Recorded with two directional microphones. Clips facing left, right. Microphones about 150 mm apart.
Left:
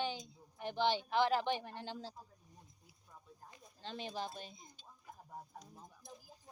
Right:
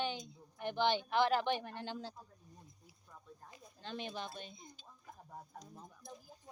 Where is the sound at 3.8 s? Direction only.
35° left (ahead or behind).